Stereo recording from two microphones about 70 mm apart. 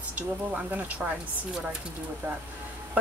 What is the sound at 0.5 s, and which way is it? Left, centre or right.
Speech, centre.